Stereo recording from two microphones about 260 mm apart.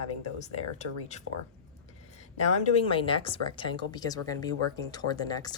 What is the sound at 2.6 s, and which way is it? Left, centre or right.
Speech, left.